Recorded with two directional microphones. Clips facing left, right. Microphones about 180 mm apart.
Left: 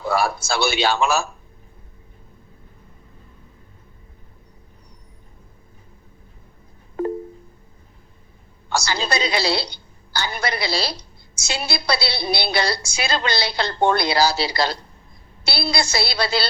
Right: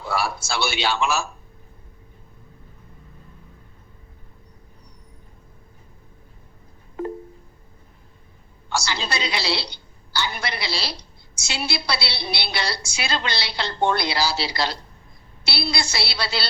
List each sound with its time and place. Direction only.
0.0 s a woman's voice: 45° left (ahead or behind)
8.7 s a woman's voice: 40° left (ahead or behind)